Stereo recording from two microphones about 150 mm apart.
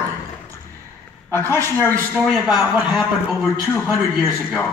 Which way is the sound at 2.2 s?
5° right (ahead or behind).